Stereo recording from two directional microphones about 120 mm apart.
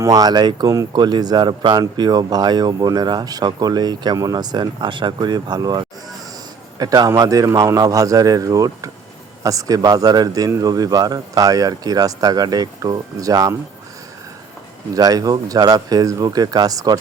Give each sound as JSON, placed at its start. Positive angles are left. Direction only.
{"t": 0.0, "sound": "speech", "side_deg": -30}
{"t": 14.9, "sound": "speech", "side_deg": -30}